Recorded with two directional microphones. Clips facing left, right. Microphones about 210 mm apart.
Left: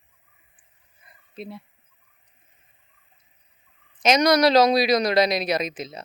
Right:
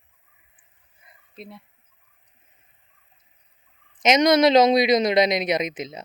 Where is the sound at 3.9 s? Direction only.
20° right (ahead or behind).